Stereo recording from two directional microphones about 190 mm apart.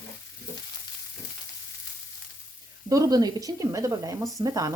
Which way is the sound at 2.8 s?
20° right (ahead or behind).